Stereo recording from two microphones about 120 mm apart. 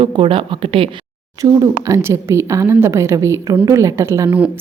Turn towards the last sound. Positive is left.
turn(degrees=-25)  # may be behind; listen again after turning